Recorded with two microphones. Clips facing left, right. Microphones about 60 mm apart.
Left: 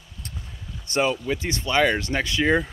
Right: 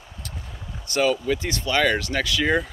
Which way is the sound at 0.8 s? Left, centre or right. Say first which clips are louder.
Right 1 dB; left.